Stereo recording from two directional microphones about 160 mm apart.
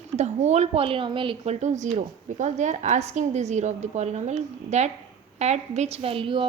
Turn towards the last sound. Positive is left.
turn(degrees=-35)  # may be behind; listen again after turning